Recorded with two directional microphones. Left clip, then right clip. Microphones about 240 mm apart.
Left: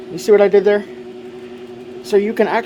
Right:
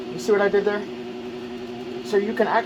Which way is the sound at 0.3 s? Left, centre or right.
Left.